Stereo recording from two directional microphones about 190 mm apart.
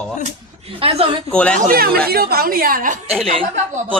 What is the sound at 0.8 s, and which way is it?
Speech, 30° right (ahead or behind).